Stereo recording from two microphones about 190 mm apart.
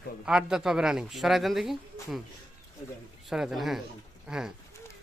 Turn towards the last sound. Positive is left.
turn(degrees=-5)  # may be behind; listen again after turning